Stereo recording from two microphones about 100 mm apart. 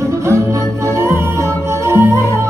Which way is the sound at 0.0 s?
30° right (ahead or behind).